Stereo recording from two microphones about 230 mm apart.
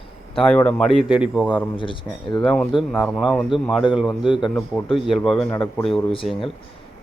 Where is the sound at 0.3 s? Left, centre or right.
Centre.